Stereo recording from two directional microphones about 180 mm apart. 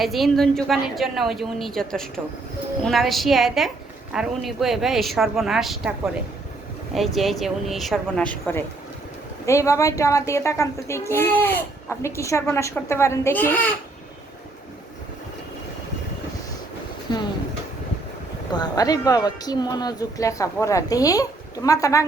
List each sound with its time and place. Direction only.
0.0 s speech: centre (ahead or behind)
6.9 s a child's voice: centre (ahead or behind)
17.1 s speech: 25° left (ahead or behind)
18.5 s speech: 20° left (ahead or behind)